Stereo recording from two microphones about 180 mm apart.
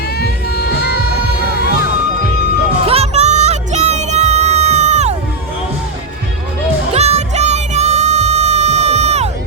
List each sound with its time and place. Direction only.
0.2 s music: 65° left (ahead or behind)
2.8 s music: 35° right (ahead or behind)
6.9 s music: 35° right (ahead or behind)